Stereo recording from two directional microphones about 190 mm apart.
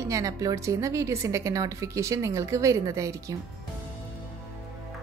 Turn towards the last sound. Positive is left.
turn(degrees=-15)  # may be behind; listen again after turning